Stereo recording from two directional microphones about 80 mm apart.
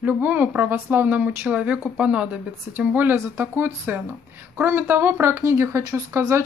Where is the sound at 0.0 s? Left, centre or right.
Right.